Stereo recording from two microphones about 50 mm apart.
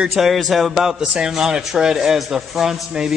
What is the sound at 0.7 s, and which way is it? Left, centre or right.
A man's voice, centre.